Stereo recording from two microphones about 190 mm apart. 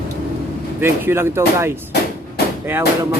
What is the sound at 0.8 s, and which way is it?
A man's voice, 10° right (ahead or behind).